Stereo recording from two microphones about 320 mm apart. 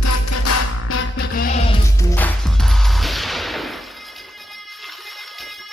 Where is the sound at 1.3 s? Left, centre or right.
Left.